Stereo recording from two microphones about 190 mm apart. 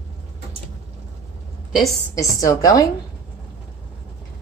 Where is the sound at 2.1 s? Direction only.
15° left (ahead or behind).